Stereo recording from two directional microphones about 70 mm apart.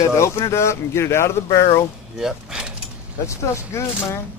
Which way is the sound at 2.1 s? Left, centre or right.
Centre.